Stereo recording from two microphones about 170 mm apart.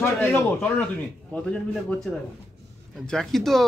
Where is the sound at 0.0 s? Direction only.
10° left (ahead or behind).